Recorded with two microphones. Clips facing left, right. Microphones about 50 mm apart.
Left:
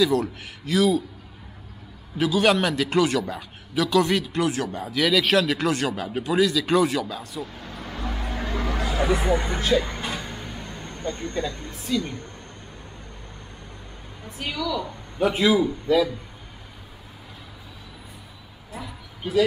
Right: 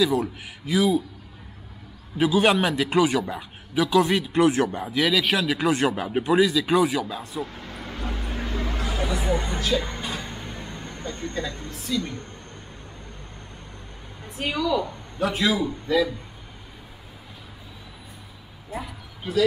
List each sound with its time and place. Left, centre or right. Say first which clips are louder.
0.0 s a man's voice: left 1 dB; centre
2.1 s a man's voice: right 1 dB; centre
4.3 s a woman's voice: right 5 dB; right
4.9 s a man's voice: left 3 dB; centre
7.4 s vehicle: even; right
8.1 s vehicle: left 2 dB; left
9.3 s speech: left 2 dB; left
10.3 s vehicle: even; centre
11.1 s speech: left 3 dB; left
14.4 s a woman's voice: right 4 dB; right
15.1 s a man's voice: left 4 dB; centre
15.6 s a man's voice: left 2 dB; centre